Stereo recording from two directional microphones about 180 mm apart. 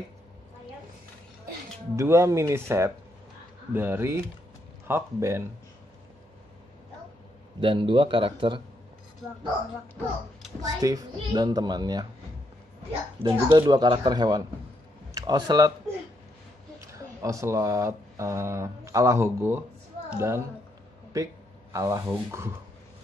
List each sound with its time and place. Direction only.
2.0 s speech: 15° right (ahead or behind)
7.6 s a child's voice: 30° right (ahead or behind)
10.6 s a child's voice: 20° right (ahead or behind)
13.2 s a child's voice: 25° right (ahead or behind)
16.8 s a woman's voice: 15° right (ahead or behind)